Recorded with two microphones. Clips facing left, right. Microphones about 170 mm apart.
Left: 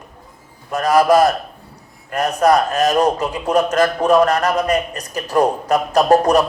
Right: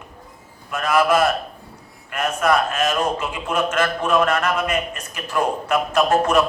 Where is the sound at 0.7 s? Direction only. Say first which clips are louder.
Left 5 dB; 35° left (ahead or behind).